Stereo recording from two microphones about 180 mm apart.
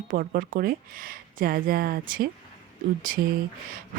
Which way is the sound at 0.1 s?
50° right (ahead or behind).